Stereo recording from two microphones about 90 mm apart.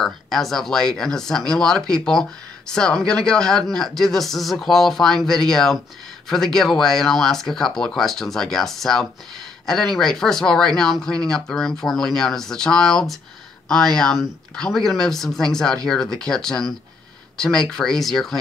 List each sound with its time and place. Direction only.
0.0 s speech: 5° left (ahead or behind)